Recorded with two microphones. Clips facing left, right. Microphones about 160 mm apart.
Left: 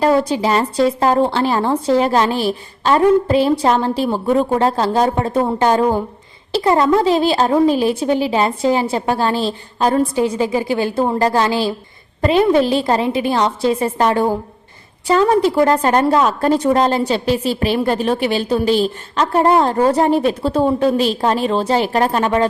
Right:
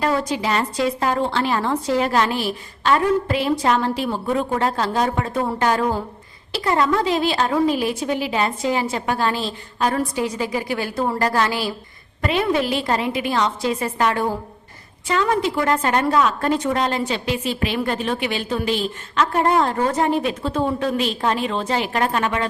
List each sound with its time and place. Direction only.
0.0 s a woman's voice: 30° left (ahead or behind)